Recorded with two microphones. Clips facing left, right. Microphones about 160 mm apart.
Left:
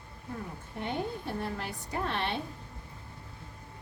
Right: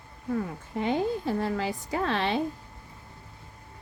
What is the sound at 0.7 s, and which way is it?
A woman's voice, 90° right.